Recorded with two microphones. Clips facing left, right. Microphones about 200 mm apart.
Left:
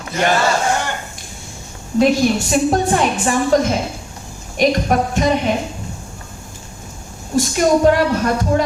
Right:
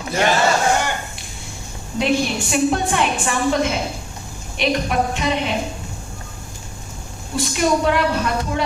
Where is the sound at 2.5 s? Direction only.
40° left (ahead or behind).